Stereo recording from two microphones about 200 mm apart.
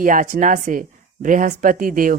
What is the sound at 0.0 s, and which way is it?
Speech, 40° right (ahead or behind).